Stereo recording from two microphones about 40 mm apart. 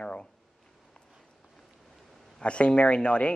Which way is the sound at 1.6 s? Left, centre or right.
Centre.